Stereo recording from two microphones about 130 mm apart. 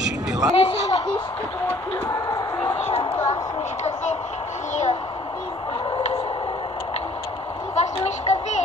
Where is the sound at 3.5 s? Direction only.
60° left (ahead or behind).